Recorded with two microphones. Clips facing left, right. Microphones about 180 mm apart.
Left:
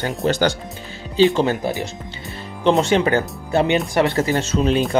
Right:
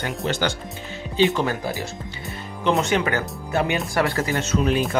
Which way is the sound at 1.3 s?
25° left (ahead or behind).